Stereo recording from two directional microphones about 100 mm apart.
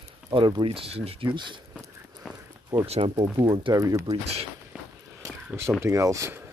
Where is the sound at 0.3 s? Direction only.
55° right (ahead or behind); by 1.3 s 75° right (ahead or behind).